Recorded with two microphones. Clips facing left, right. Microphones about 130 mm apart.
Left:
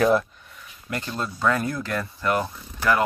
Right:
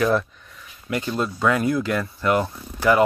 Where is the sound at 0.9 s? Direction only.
15° right (ahead or behind).